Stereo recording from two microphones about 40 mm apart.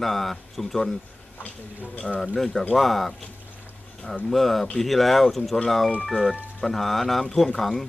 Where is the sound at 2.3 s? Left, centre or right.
Centre.